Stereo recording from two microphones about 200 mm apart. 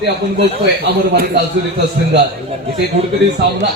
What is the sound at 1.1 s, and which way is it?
A man's voice, 55° right (ahead or behind).